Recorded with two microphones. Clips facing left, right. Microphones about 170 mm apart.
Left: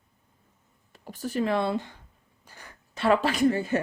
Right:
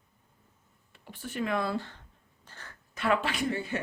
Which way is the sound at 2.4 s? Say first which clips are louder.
Left 1 dB; 10° left (ahead or behind).